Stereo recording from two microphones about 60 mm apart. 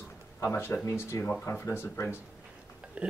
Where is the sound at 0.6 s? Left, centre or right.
Left.